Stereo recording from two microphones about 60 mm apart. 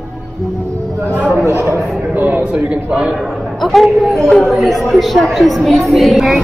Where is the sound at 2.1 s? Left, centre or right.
Right.